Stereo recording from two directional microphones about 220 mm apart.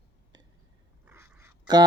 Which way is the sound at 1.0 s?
10° right (ahead or behind).